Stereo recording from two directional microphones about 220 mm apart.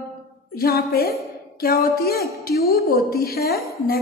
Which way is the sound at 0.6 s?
45° left (ahead or behind).